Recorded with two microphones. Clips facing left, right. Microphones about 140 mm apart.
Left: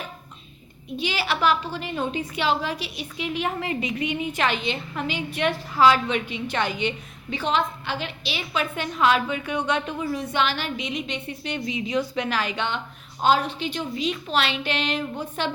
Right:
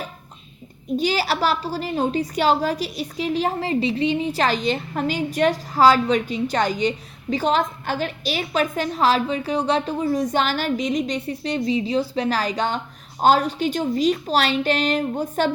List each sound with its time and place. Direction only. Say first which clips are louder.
0.9 s a woman's voice: right 5 dB; 40° right (ahead or behind)